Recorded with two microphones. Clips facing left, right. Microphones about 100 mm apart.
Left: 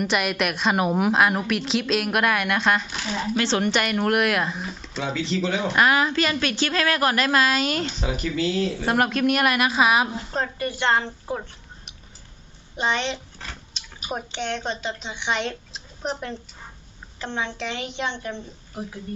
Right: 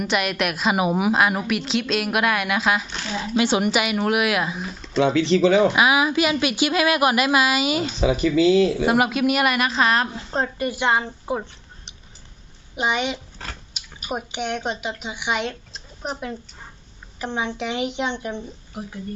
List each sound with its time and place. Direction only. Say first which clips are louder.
0.0 s a woman's voice: right 1 dB; centre (ahead or behind)
3.3 s a woman's voice: right 3 dB; 10° right (ahead or behind)
4.9 s speech: right 9 dB; 70° right (ahead or behind)
5.7 s a woman's voice: right 1 dB; 5° right (ahead or behind)
8.2 s speech: right 8 dB; 90° right
8.9 s a woman's voice: right 2 dB; 5° right (ahead or behind)
10.3 s a woman's voice: right 4 dB; 20° right (ahead or behind)
12.7 s a woman's voice: right 2 dB; 10° right (ahead or behind)